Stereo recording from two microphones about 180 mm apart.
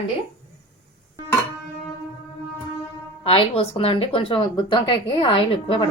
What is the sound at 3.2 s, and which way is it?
A woman's voice, 30° left (ahead or behind).